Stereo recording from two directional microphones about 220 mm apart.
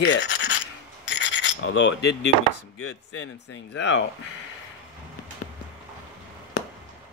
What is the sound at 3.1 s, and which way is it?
Speech, 50° left (ahead or behind).